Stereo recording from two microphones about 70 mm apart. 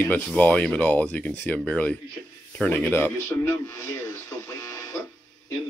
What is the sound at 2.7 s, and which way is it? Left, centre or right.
A man's voice, left.